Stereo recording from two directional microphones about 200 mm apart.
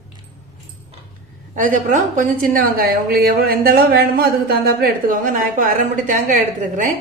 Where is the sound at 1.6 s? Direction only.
40° right (ahead or behind).